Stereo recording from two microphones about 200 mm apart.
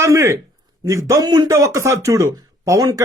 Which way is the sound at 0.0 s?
15° right (ahead or behind).